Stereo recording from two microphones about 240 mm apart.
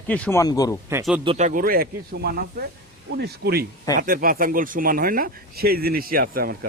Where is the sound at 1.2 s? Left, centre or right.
Right.